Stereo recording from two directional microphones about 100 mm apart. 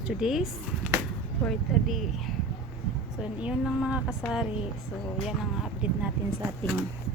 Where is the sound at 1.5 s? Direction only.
Centre (ahead or behind).